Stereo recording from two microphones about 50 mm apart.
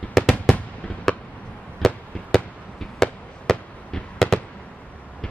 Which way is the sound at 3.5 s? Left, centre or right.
Centre.